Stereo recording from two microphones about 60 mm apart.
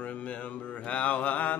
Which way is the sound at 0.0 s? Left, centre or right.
Left.